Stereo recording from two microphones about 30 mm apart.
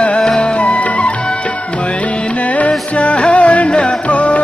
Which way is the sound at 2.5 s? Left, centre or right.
Left.